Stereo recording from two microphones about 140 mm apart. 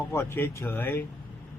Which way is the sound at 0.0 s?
15° left (ahead or behind).